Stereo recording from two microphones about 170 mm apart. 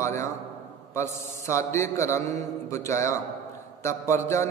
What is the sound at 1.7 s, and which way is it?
A man's voice, 15° left (ahead or behind).